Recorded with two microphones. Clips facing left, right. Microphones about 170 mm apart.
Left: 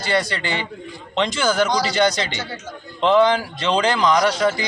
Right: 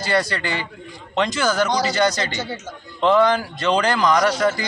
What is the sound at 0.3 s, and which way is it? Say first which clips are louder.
Speech: even; 25° left (ahead or behind).